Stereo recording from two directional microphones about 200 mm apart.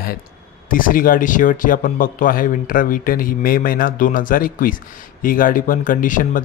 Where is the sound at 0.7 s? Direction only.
45° left (ahead or behind).